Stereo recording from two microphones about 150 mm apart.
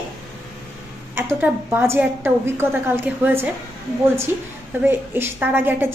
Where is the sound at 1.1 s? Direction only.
15° right (ahead or behind).